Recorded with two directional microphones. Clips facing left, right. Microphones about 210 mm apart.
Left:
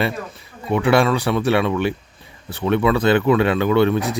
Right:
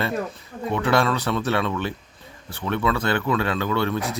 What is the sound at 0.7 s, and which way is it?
Speech, 15° left (ahead or behind).